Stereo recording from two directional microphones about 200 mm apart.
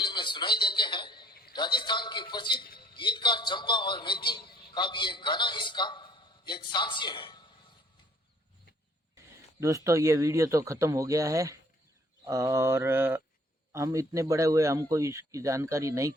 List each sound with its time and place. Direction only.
0.0 s a man's voice: 25° left (ahead or behind)
9.6 s speech: 15° right (ahead or behind)